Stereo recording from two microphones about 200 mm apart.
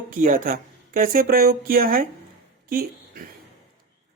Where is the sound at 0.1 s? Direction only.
40° right (ahead or behind).